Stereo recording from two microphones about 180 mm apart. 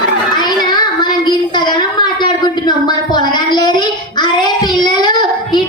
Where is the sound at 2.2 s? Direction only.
25° left (ahead or behind).